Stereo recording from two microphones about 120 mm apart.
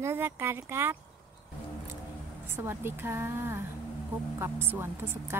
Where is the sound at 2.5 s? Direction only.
20° right (ahead or behind).